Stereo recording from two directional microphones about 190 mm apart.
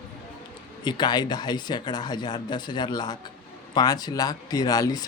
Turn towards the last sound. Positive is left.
turn(degrees=20)  # may be behind; listen again after turning